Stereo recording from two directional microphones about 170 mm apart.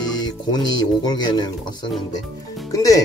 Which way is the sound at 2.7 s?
20° left (ahead or behind).